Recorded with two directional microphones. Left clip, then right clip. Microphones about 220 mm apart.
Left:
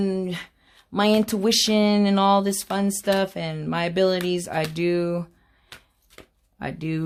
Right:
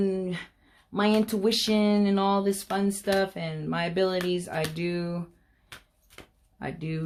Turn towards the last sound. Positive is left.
turn(degrees=40)  # may be behind; listen again after turning